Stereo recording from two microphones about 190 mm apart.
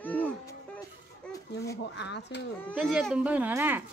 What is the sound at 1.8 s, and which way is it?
Speech, 65° left (ahead or behind).